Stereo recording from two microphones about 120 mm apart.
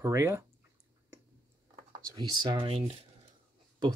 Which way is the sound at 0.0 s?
25° right (ahead or behind).